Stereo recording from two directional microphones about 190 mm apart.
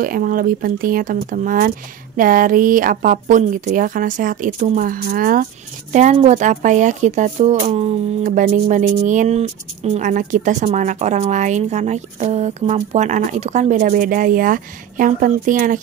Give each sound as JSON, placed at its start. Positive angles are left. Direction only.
{"t": 0.0, "sound": "speech", "side_deg": -50}